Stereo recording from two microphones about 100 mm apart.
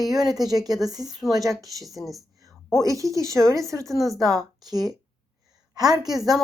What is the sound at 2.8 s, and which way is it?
Speech, 35° right (ahead or behind).